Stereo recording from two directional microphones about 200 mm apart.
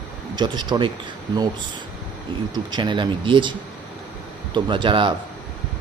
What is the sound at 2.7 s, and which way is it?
Speech, 25° right (ahead or behind).